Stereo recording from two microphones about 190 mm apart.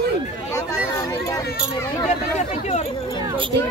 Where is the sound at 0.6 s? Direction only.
15° left (ahead or behind).